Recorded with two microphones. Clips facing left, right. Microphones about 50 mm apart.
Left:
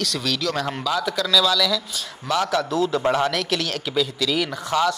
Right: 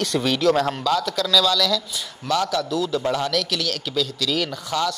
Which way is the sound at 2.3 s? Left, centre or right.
Left.